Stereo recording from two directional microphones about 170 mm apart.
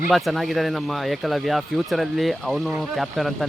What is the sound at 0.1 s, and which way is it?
Speech, centre (ahead or behind).